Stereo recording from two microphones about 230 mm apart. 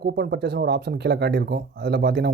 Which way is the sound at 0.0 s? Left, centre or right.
Right.